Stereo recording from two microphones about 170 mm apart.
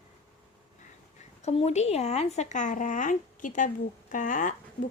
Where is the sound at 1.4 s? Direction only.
40° left (ahead or behind).